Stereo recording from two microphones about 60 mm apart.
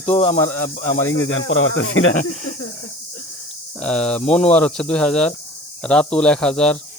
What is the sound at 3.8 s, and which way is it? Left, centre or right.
Speech, centre.